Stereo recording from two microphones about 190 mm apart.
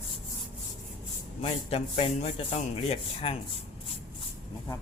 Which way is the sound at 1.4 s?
30° left (ahead or behind).